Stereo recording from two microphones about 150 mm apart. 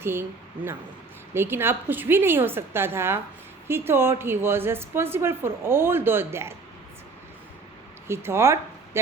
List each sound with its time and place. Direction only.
0.0 s a woman's voice: 15° right (ahead or behind)
8.0 s speech: 15° right (ahead or behind)